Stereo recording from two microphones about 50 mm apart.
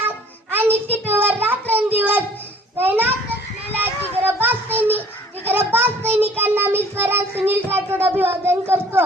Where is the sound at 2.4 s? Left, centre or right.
Right.